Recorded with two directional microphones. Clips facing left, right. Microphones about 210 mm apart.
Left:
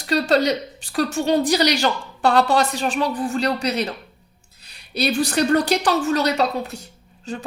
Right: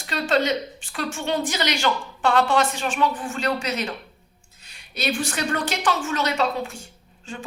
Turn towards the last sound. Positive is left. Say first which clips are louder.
# left 5 dB
turn(degrees=40)  # may be behind; listen again after turning